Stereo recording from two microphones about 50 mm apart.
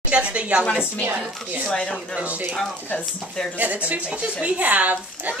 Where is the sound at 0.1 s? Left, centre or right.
Right.